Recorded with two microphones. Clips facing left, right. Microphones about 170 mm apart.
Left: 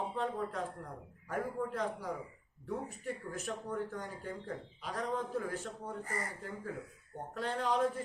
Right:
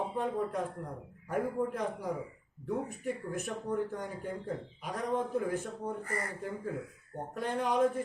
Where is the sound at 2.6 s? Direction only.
15° right (ahead or behind).